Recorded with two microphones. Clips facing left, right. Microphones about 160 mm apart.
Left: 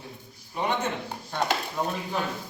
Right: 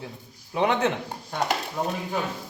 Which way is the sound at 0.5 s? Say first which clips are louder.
Right 5 dB; 90° right.